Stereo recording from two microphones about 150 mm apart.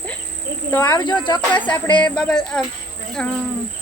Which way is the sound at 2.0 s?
5° left (ahead or behind).